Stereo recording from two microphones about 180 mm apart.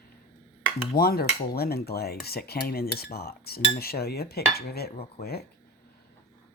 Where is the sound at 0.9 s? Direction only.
55° left (ahead or behind).